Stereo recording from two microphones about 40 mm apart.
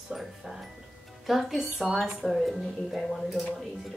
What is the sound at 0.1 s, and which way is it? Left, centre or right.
Music, centre.